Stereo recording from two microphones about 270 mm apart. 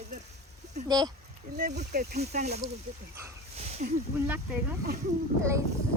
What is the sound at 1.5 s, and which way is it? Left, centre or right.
Speech, right.